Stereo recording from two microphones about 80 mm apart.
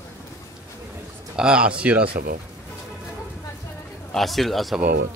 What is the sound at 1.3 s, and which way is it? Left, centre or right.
Speech, centre.